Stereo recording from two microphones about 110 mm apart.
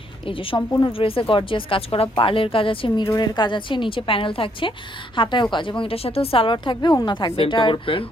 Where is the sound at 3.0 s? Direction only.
30° left (ahead or behind).